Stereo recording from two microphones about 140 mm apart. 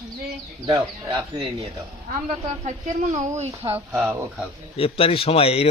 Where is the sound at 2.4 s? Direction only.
55° right (ahead or behind).